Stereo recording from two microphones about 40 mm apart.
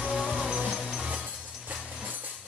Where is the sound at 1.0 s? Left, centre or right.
Right.